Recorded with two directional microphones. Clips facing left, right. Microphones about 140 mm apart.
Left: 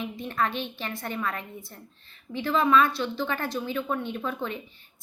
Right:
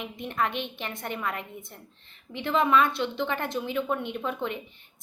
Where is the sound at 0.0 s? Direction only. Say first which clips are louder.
Left 1 dB; 20° right (ahead or behind).